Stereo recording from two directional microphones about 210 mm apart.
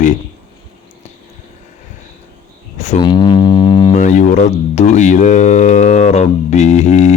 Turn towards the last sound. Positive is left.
turn(degrees=35)  # may be behind; listen again after turning